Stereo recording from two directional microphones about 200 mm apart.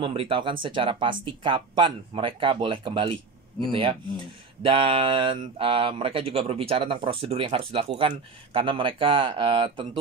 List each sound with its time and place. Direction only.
0.0 s speech: 25° right (ahead or behind)